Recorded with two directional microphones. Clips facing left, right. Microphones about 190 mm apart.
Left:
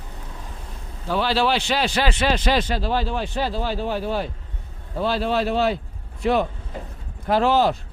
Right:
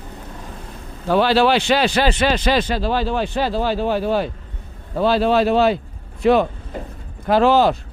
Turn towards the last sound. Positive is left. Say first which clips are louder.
# right 4 dB
turn(degrees=-90)